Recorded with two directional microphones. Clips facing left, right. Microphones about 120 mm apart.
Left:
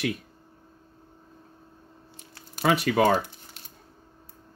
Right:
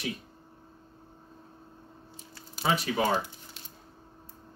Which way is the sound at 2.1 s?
60° left (ahead or behind).